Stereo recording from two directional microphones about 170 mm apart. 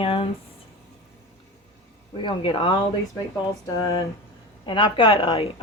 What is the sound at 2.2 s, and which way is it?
Speech, 30° left (ahead or behind).